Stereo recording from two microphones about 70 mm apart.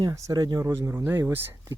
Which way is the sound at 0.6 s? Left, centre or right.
Right.